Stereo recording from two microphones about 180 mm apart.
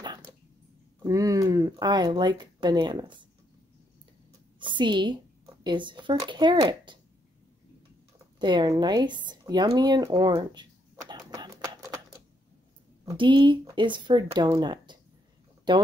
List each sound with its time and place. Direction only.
0.9 s speech: 15° right (ahead or behind)
4.6 s speech: 25° right (ahead or behind)
8.4 s speech: 25° right (ahead or behind)
10.3 s a sound: 25° right (ahead or behind)
13.0 s speech: 25° right (ahead or behind)